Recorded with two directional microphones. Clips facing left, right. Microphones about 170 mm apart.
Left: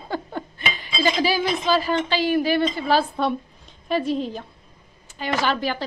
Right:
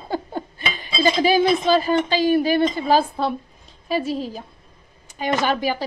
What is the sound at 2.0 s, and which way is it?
Speech, 45° right (ahead or behind).